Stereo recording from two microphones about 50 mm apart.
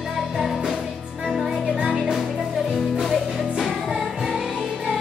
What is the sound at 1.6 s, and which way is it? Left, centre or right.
Music, right.